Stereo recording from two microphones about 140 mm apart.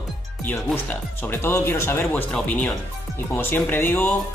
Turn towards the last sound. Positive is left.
turn(degrees=15)  # may be behind; listen again after turning